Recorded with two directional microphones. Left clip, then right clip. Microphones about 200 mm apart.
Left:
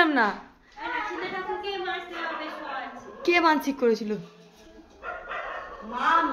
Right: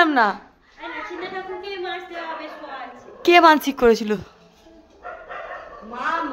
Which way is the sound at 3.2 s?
35° right (ahead or behind).